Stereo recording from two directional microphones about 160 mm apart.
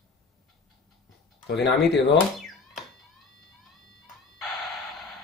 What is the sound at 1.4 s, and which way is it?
Speech, 90° left.